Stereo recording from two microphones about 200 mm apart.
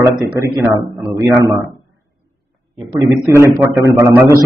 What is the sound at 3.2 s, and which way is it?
A man's voice, 15° right (ahead or behind).